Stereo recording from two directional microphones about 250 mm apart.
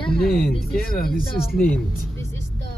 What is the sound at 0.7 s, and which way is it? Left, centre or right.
Speech, left.